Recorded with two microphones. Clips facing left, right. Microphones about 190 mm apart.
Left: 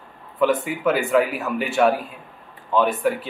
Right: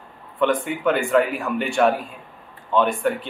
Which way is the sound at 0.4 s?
5° left (ahead or behind).